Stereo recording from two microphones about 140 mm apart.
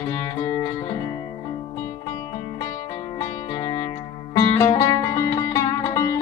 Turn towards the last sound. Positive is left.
turn(degrees=25)  # may be behind; listen again after turning